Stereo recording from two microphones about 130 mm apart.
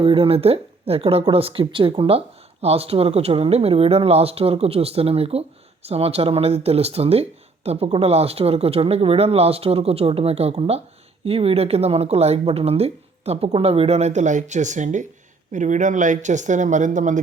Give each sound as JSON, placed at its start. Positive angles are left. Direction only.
{"t": 0.0, "sound": "a woman's voice", "side_deg": -45}